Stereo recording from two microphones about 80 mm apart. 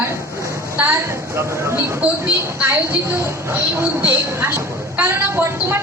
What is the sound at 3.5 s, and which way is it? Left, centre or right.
A woman's voice, right.